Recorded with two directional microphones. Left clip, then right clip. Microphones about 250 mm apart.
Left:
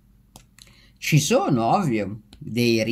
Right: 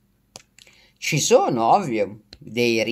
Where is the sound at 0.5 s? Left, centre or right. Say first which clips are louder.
Right 1 dB; centre.